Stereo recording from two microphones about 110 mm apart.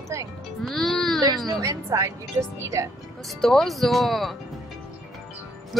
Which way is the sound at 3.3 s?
5° left (ahead or behind).